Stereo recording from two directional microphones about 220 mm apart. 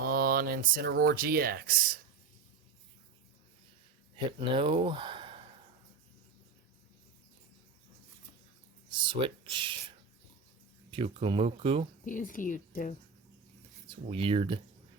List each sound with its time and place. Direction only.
0.0 s speech: 45° right (ahead or behind)
4.3 s speech: 20° right (ahead or behind)
8.9 s speech: 20° right (ahead or behind)
10.9 s speech: 25° right (ahead or behind)
12.0 s a woman's voice: 35° left (ahead or behind)
13.8 s speech: 25° right (ahead or behind)